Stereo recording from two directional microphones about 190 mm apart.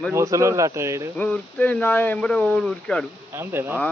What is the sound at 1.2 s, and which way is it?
Speech, 5° left (ahead or behind).